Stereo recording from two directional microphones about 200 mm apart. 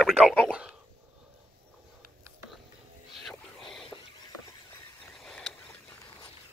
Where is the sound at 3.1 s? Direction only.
Centre (ahead or behind).